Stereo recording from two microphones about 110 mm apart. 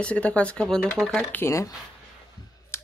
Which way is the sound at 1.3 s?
20° left (ahead or behind).